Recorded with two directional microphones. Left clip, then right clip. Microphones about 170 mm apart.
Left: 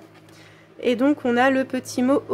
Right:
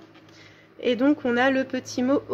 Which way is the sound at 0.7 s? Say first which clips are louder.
Left 2 dB; 15° left (ahead or behind).